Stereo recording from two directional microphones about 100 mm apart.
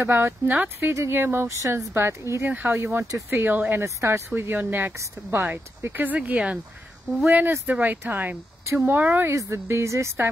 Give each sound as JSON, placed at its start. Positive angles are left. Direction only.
{"t": 0.0, "sound": "speech", "side_deg": -20}
{"t": 3.3, "sound": "speech", "side_deg": -20}
{"t": 4.3, "sound": "speech", "side_deg": -20}
{"t": 9.3, "sound": "speech", "side_deg": -30}